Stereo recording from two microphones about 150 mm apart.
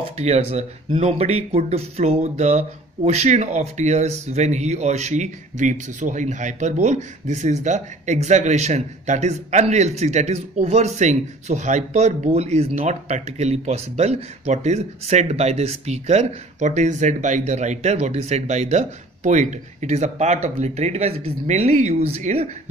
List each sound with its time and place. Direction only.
0.0 s speech: 45° right (ahead or behind)